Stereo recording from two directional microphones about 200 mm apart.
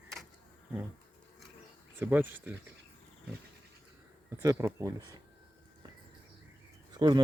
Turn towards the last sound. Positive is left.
turn(degrees=-20)  # may be behind; listen again after turning